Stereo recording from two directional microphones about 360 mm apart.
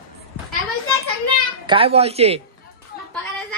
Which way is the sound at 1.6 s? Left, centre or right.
Centre.